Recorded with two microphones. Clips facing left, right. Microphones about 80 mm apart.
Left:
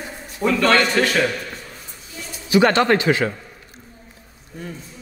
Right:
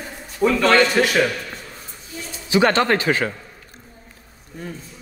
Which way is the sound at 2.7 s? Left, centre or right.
Right.